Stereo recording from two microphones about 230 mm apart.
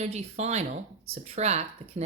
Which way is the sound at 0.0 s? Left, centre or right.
Right.